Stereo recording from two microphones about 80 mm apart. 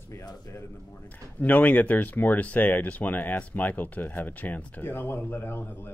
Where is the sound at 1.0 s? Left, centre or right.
Left.